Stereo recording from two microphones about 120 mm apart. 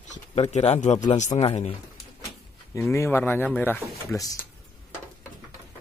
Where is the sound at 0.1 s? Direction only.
70° left (ahead or behind).